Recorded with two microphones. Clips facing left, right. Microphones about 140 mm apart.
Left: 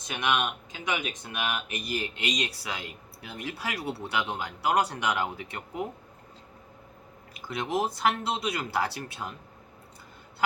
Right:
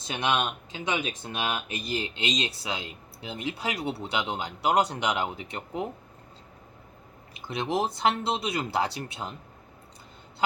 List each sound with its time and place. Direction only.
0.0 s speech: 30° right (ahead or behind)
7.3 s speech: 25° right (ahead or behind)